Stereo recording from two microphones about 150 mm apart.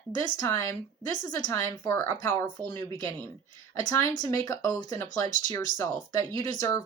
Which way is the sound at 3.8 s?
25° left (ahead or behind).